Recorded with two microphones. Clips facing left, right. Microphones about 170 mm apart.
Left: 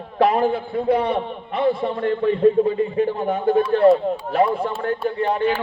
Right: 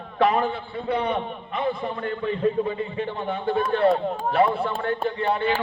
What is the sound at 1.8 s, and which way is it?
A man's voice, 35° left (ahead or behind).